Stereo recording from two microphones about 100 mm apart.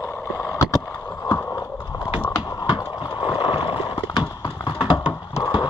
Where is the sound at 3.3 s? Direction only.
55° left (ahead or behind).